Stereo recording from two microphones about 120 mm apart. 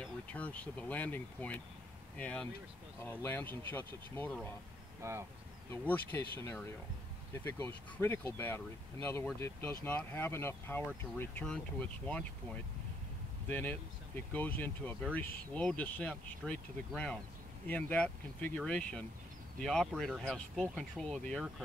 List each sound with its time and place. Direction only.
0.0 s speech: 10° left (ahead or behind)
5.0 s speech: 25° right (ahead or behind)
5.7 s speech: 15° left (ahead or behind)
7.4 s speech: 20° left (ahead or behind)
13.5 s speech: 15° left (ahead or behind)